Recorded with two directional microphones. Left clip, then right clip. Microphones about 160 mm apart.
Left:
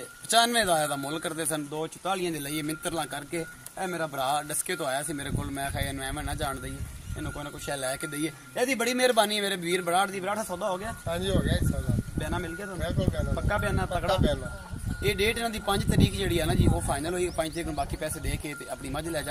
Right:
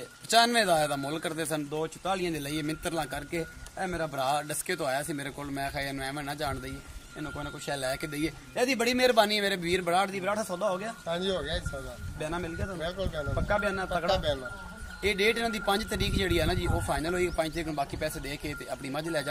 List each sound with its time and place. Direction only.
0.3 s a man's voice: 10° right (ahead or behind)
11.1 s speech: 5° left (ahead or behind)
12.2 s speech: 25° right (ahead or behind)
15.0 s a man's voice: 20° right (ahead or behind)